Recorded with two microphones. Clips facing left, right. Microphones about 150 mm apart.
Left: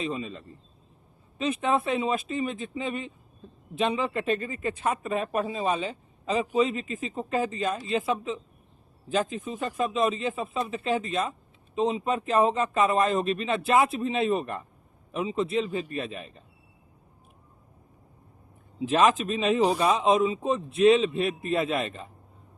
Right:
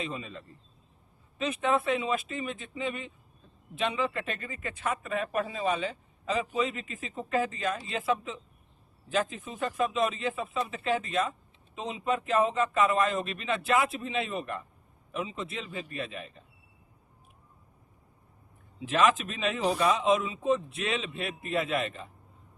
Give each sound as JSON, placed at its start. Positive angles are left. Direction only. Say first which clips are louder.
{"t": 0.0, "sound": "speech", "louder": "left 5 dB", "side_deg": 25}
{"t": 1.4, "sound": "a man's voice", "louder": "left 2 dB", "side_deg": 30}
{"t": 18.8, "sound": "a man's voice", "louder": "left 3 dB", "side_deg": 35}